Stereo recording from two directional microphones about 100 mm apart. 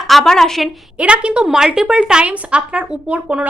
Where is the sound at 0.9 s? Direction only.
10° right (ahead or behind).